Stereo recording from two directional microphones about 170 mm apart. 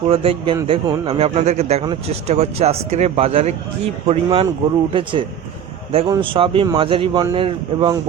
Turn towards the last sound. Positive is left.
turn(degrees=-30)  # may be behind; listen again after turning